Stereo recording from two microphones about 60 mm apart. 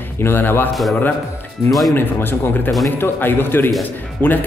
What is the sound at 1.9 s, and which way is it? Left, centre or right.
A man's voice, left.